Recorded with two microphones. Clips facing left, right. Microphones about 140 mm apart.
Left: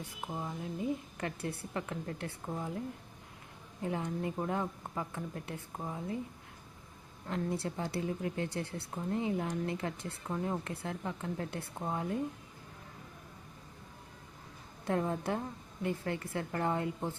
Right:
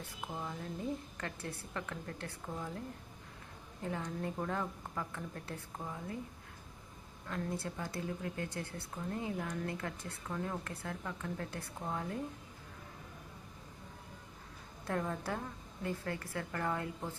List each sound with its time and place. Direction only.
0.3 s a woman's voice: 15° left (ahead or behind)
3.8 s a woman's voice: 20° left (ahead or behind)
7.3 s a woman's voice: 25° left (ahead or behind)
14.8 s a woman's voice: 20° left (ahead or behind)